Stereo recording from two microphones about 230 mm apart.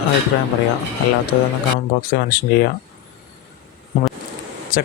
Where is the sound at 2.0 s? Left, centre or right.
Left.